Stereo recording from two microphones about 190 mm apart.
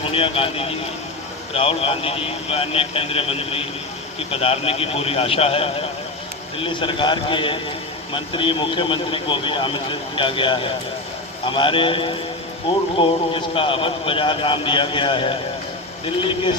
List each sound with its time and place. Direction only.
0.0 s speech: 30° left (ahead or behind)